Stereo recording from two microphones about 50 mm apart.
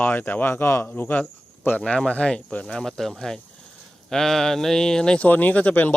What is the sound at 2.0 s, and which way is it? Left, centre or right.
Speech, left.